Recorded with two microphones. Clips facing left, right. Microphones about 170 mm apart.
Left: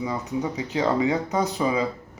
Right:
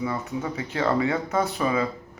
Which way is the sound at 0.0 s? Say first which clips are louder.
Left 1 dB; 15° left (ahead or behind).